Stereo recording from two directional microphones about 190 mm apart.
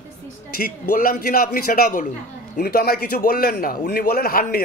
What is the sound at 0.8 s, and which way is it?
A man's voice, 50° left (ahead or behind).